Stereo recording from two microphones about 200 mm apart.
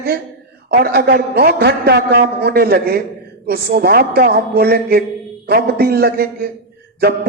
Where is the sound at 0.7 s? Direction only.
50° right (ahead or behind).